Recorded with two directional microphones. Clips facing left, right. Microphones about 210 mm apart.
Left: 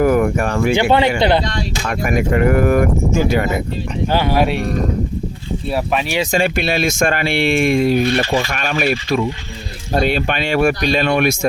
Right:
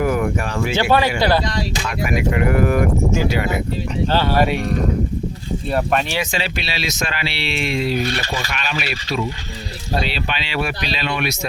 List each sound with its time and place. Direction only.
0.0 s speech: 50° left (ahead or behind)
0.8 s speech: 20° left (ahead or behind)
1.9 s speech: 50° left (ahead or behind)
4.0 s speech: 15° left (ahead or behind)
5.7 s speech: centre (ahead or behind)
6.3 s speech: 50° left (ahead or behind)